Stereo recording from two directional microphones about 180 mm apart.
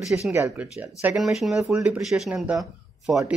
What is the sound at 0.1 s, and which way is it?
Speech, 15° right (ahead or behind).